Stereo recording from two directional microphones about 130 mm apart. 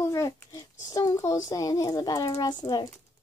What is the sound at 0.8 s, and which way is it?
A woman's voice, 30° left (ahead or behind).